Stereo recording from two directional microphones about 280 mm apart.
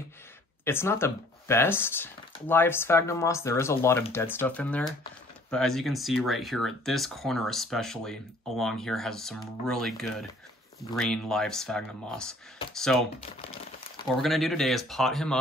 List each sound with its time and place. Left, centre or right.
0.7 s speech: centre
13.2 s crumpling: centre
14.2 s speech: centre